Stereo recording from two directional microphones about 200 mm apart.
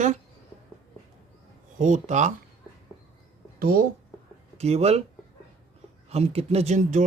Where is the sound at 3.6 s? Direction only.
45° right (ahead or behind).